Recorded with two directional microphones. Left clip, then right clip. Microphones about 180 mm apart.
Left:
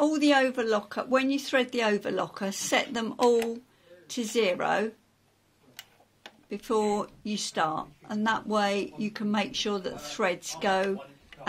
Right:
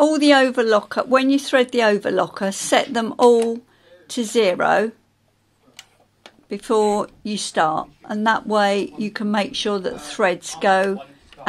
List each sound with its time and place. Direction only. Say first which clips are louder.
0.0 s speech: right 9 dB; 55° right (ahead or behind)
6.5 s speech: right 9 dB; 55° right (ahead or behind)